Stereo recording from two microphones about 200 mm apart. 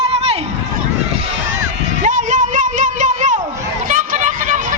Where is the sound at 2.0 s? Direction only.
40° right (ahead or behind).